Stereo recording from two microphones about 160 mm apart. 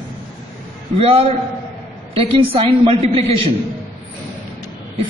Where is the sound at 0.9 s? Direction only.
35° right (ahead or behind).